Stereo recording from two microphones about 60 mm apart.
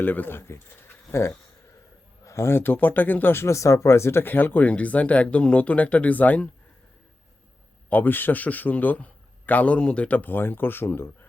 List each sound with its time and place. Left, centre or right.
0.0 s a man's voice: left
3.4 s speech: left
7.9 s a man's voice: left